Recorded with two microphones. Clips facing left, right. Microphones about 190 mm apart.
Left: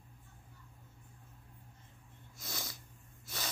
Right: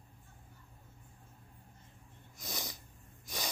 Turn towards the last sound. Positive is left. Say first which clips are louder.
# right 3 dB
turn(degrees=-15)  # may be behind; listen again after turning